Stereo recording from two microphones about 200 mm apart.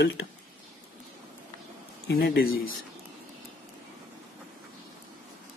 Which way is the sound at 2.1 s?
50° left (ahead or behind).